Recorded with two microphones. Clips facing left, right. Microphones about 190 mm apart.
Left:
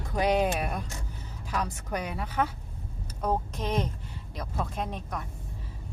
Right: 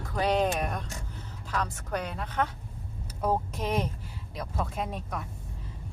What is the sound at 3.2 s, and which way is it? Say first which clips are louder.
Speech: right 1 dB; 5° right (ahead or behind).